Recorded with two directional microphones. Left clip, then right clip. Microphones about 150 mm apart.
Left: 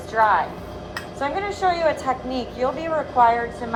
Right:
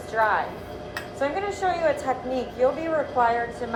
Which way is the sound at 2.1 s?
25° left (ahead or behind).